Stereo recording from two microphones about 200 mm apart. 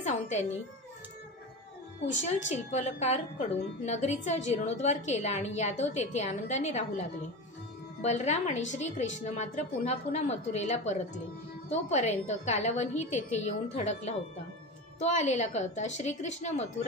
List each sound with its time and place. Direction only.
0.0 s music: 35° left (ahead or behind)
2.5 s a woman's voice: 35° left (ahead or behind)